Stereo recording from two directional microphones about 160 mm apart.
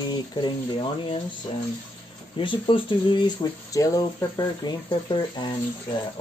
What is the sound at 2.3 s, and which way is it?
Speech, 30° left (ahead or behind).